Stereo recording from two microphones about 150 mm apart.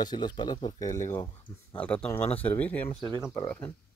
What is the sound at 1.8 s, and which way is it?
Speech, 10° left (ahead or behind).